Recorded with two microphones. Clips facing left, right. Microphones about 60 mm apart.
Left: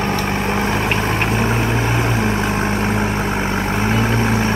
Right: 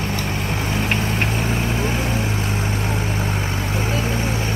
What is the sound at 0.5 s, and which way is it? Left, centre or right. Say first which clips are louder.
Vehicle: left 3 dB; left.